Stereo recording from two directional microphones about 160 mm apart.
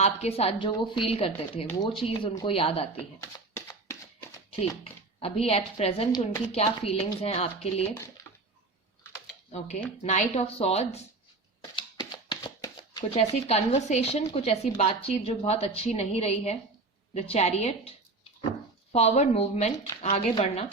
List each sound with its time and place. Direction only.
0.0 s a woman's voice: 40° left (ahead or behind)
3.7 s a sound: 20° left (ahead or behind)
4.8 s a woman's voice: 40° left (ahead or behind)
6.5 s a woman's voice: 40° left (ahead or behind)
7.9 s speech: 15° left (ahead or behind)
9.5 s a woman's voice: 45° left (ahead or behind)
11.6 s a sound: 30° left (ahead or behind)
13.1 s a woman's voice: 45° left (ahead or behind)
18.9 s a woman's voice: 45° left (ahead or behind)